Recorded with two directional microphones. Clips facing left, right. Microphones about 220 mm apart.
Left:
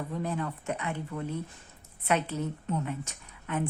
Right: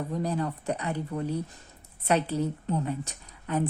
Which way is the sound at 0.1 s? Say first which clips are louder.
Right 4 dB; 35° right (ahead or behind).